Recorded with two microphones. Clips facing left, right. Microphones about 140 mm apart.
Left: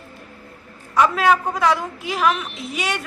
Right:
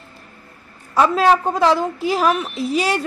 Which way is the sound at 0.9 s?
30° right (ahead or behind).